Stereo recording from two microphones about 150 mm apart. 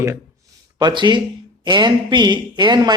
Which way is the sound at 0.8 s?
30° right (ahead or behind).